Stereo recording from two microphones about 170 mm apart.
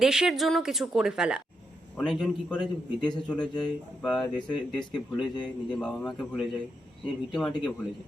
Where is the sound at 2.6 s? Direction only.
25° left (ahead or behind).